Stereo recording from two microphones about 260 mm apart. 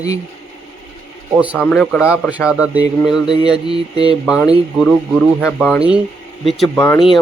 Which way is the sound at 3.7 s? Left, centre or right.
Right.